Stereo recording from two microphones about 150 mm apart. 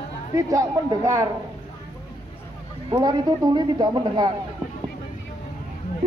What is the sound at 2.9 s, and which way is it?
Speech, 30° right (ahead or behind).